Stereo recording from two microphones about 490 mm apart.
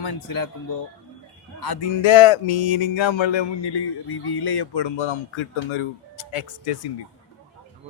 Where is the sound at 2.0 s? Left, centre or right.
Left.